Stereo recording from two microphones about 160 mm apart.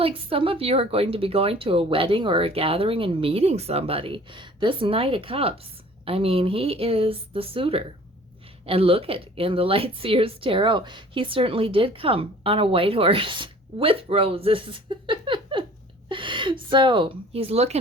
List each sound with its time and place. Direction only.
0.0 s a woman's voice: 35° right (ahead or behind)